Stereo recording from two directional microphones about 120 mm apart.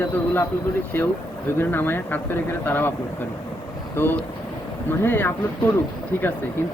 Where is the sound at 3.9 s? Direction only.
20° left (ahead or behind).